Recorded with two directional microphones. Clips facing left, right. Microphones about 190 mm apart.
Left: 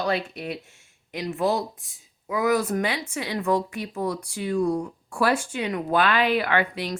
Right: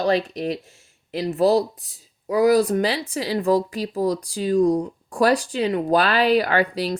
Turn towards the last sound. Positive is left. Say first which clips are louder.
# right 4 dB
turn(degrees=-35)  # may be behind; listen again after turning